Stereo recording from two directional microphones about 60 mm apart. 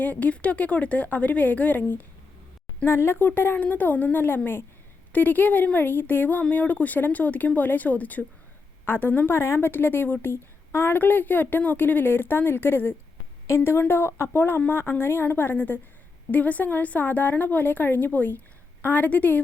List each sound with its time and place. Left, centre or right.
0.0 s a woman's voice: left
2.8 s a woman's voice: left